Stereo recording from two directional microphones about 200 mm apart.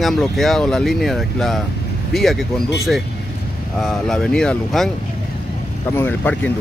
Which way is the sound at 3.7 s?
Centre (ahead or behind).